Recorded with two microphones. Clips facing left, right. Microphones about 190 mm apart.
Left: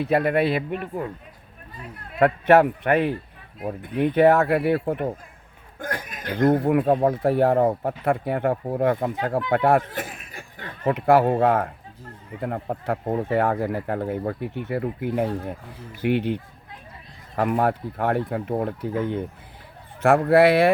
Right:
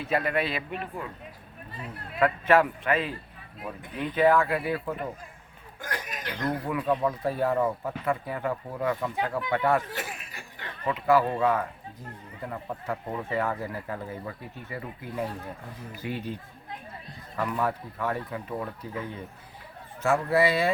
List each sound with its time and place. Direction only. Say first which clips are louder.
0.1 s speech: left 6 dB; 55° left (ahead or behind)
2.1 s speech: left 6 dB; 60° left (ahead or behind)
3.6 s speech: left 10 dB; 55° left (ahead or behind)
5.8 s speech: left 4 dB; 50° left (ahead or behind)
7.3 s speech: left 7 dB; 65° left (ahead or behind); by 10.9 s 50° left (ahead or behind)
11.3 s speech: left 6 dB; 60° left (ahead or behind)
20.0 s speech: left 8 dB; 60° left (ahead or behind)